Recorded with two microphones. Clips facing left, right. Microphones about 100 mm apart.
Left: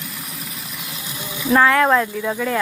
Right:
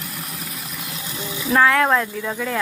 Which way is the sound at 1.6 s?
Centre (ahead or behind).